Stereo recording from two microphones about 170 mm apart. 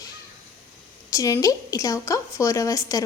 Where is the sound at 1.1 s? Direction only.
20° left (ahead or behind).